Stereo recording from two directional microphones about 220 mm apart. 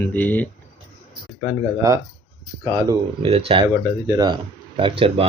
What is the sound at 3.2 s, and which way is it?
Speech, 25° right (ahead or behind).